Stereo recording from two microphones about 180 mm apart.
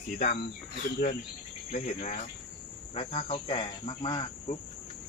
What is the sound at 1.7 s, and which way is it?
Speech, 40° left (ahead or behind).